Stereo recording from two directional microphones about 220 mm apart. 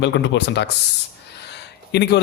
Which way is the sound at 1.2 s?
50° left (ahead or behind).